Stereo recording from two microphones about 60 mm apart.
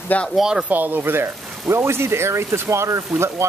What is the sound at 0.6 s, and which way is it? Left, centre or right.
Speech, right.